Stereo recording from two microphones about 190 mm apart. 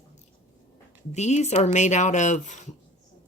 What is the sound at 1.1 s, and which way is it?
Speech, 35° left (ahead or behind).